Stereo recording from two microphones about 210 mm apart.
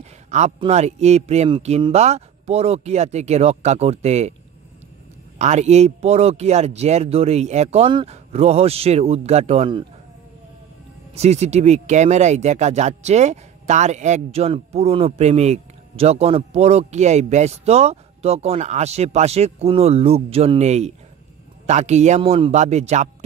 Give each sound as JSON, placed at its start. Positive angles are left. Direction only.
{"t": 0.0, "sound": "a sound", "side_deg": -35}
{"t": 0.6, "sound": "speech", "side_deg": -30}
{"t": 5.4, "sound": "speech", "side_deg": -35}
{"t": 11.1, "sound": "speech", "side_deg": -30}